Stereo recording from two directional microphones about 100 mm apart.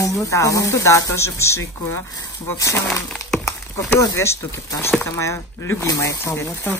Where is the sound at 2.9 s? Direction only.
5° left (ahead or behind).